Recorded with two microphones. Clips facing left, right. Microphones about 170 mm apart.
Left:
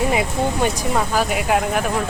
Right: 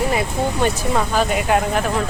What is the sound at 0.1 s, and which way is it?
Speech, 15° left (ahead or behind).